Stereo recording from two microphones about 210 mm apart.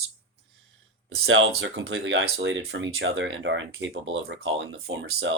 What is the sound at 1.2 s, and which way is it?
Speech, 70° right (ahead or behind).